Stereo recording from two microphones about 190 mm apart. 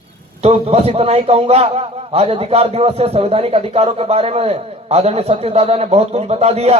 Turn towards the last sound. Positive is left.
turn(degrees=-35)  # may be behind; listen again after turning